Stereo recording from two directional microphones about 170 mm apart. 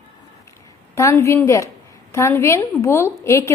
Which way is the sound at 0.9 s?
15° left (ahead or behind).